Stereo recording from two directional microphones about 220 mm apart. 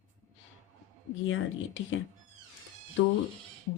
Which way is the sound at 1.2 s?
60° left (ahead or behind).